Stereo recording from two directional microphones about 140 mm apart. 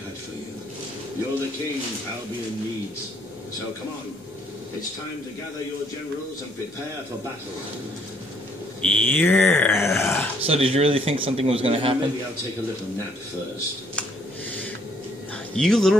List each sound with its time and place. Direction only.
8.8 s speech: 10° left (ahead or behind)
10.4 s speech: 45° right (ahead or behind)
15.5 s speech: 5° left (ahead or behind)